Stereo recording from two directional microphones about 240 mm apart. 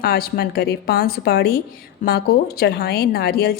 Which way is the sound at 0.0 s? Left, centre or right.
Left.